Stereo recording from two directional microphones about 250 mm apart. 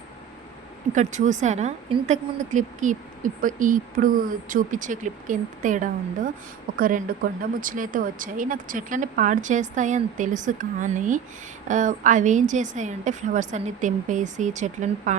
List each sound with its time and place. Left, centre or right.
0.9 s a woman's voice: right